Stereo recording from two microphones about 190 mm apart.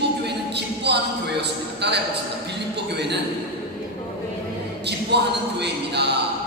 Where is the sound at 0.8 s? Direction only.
60° right (ahead or behind).